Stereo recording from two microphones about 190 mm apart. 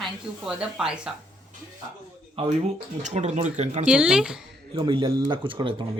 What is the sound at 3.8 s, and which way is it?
Speech, 5° right (ahead or behind).